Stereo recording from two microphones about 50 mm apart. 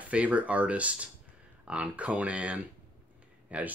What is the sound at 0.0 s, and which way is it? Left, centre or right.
Speech, right.